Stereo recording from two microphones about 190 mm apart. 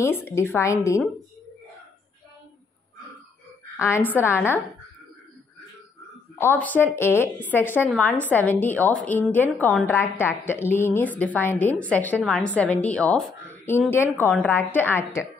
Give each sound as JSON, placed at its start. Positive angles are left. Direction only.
{"t": 0.0, "sound": "a woman's voice", "side_deg": 10}
{"t": 3.7, "sound": "a woman's voice", "side_deg": 15}
{"t": 6.3, "sound": "a woman's voice", "side_deg": 10}